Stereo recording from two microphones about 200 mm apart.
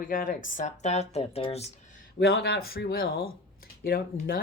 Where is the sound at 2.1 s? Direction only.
50° left (ahead or behind).